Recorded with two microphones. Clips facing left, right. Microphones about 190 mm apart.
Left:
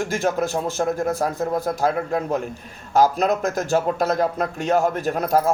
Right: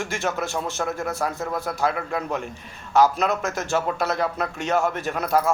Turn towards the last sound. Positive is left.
turn(degrees=40)  # may be behind; listen again after turning